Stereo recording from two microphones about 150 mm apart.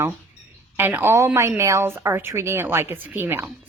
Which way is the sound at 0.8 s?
15° right (ahead or behind).